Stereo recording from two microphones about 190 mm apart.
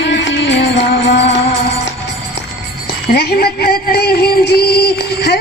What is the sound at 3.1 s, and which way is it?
Music, 55° left (ahead or behind).